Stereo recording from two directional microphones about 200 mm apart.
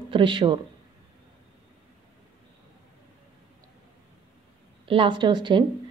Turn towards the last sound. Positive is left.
turn(degrees=-25)  # may be behind; listen again after turning